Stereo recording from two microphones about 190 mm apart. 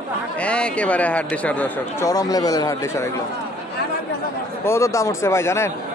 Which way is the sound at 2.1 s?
20° left (ahead or behind).